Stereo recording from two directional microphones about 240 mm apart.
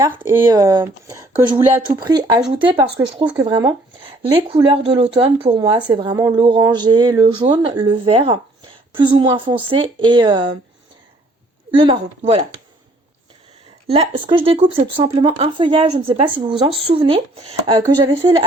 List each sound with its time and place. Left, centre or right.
0.2 s speech: centre
11.7 s speech: right
13.9 s speech: right